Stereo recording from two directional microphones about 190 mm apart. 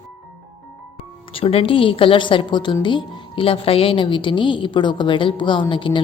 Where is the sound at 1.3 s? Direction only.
30° left (ahead or behind).